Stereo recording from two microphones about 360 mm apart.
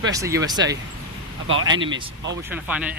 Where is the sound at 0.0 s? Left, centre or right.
Centre.